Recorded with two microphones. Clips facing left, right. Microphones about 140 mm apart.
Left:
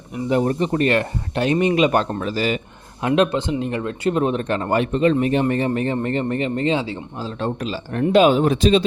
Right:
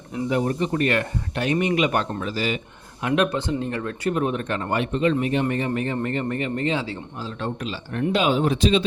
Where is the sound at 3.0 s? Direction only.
25° left (ahead or behind).